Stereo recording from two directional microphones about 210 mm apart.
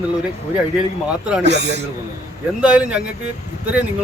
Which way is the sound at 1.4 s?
55° right (ahead or behind).